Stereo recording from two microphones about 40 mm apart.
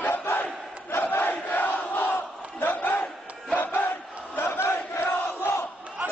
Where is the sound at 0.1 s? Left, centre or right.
Left.